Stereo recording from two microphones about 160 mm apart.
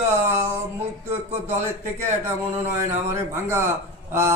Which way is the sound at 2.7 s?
15° right (ahead or behind).